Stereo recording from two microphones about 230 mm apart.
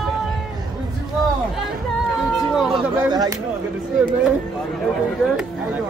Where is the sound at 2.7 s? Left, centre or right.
Centre.